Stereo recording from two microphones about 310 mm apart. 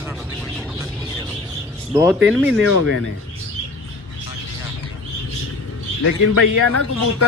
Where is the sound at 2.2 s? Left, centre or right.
Centre.